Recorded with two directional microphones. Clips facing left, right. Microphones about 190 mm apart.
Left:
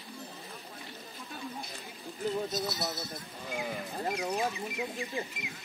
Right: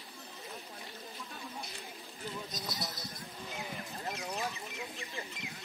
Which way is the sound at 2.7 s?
25° left (ahead or behind).